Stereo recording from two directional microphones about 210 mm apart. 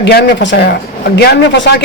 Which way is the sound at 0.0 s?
55° left (ahead or behind).